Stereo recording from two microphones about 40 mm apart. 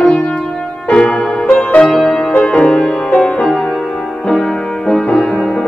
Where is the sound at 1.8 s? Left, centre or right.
Centre.